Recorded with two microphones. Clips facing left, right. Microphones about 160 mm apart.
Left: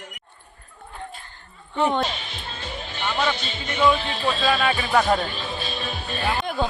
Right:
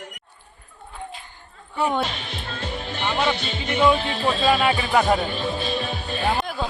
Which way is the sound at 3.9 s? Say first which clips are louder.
Right 2 dB; 30° right (ahead or behind).